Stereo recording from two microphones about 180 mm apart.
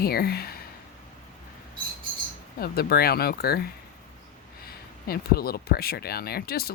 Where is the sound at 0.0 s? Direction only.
60° left (ahead or behind).